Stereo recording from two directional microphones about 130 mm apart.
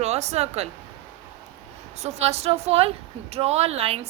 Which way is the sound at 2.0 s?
55° right (ahead or behind).